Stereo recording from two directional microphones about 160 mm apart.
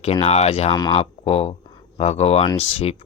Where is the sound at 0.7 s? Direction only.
30° left (ahead or behind).